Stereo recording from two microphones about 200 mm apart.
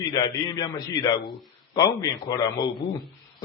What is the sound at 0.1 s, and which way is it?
A man's voice, 20° left (ahead or behind).